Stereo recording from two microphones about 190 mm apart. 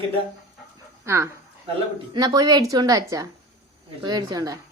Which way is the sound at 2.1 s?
20° right (ahead or behind).